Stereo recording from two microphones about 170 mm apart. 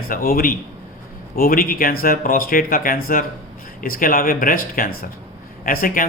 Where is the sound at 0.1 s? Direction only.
60° left (ahead or behind).